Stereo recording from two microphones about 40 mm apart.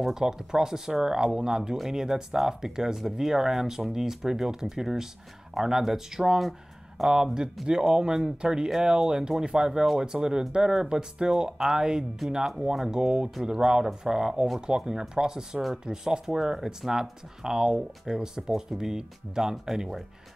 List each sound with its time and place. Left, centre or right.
0.0 s speech: centre